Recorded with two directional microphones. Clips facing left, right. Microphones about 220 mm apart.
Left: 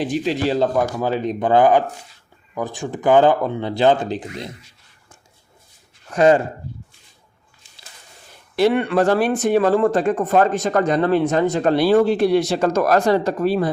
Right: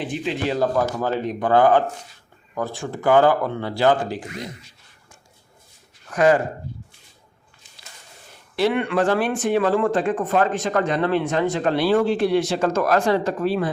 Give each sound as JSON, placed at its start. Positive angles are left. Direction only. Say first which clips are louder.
{"t": 0.0, "sound": "speech", "louder": "left 4 dB", "side_deg": 40}
{"t": 0.9, "sound": "speech", "louder": "left 2 dB", "side_deg": 10}
{"t": 6.1, "sound": "speech", "louder": "left 3 dB", "side_deg": 25}
{"t": 8.5, "sound": "speech", "louder": "left 4 dB", "side_deg": 40}